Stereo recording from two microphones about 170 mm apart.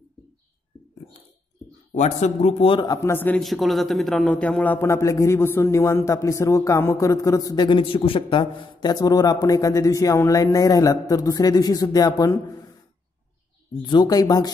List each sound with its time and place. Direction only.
2.0 s a man's voice: 45° left (ahead or behind)
3.0 s a man's voice: 15° left (ahead or behind)
13.8 s a man's voice: 25° left (ahead or behind)